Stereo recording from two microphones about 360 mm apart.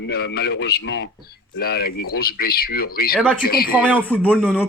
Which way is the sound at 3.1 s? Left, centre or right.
Centre.